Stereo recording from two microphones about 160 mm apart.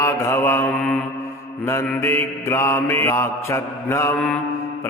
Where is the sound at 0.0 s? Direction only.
15° left (ahead or behind).